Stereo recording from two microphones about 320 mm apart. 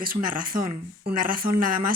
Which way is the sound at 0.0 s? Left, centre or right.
Right.